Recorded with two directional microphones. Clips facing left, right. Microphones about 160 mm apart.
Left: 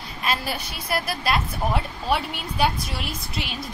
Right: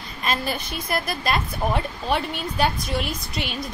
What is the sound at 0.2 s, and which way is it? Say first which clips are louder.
A woman's voice: right 1 dB; 5° left (ahead or behind).